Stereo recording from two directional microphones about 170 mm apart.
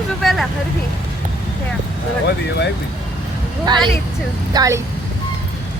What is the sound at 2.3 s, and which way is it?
Speech, 80° left.